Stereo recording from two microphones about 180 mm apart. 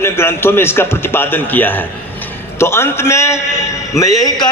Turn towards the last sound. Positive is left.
turn(degrees=20)  # may be behind; listen again after turning